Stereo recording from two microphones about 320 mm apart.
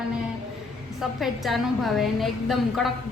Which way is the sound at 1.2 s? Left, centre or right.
Centre.